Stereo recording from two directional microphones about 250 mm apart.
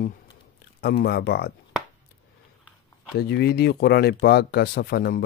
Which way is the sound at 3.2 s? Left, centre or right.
Left.